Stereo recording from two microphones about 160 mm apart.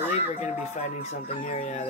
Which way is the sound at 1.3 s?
50° left (ahead or behind).